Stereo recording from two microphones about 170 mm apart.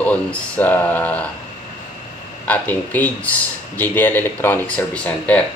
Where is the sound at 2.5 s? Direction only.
10° left (ahead or behind).